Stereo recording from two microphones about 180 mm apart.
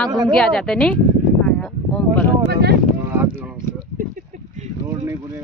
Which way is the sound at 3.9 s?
45° right (ahead or behind).